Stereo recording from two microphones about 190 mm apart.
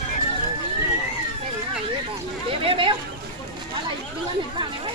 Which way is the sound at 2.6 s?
30° right (ahead or behind).